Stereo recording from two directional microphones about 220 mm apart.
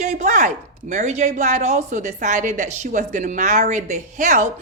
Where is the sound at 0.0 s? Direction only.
35° right (ahead or behind).